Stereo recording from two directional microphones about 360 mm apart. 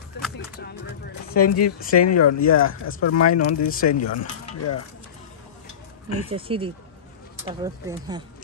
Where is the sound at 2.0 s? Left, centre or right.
Left.